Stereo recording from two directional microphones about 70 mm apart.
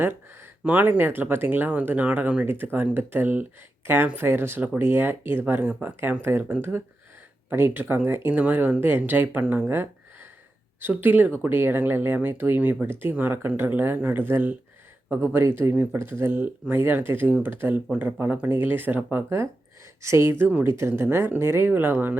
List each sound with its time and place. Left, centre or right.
0.6 s speech: right
2.7 s speech: right
8.3 s speech: right
19.1 s speech: right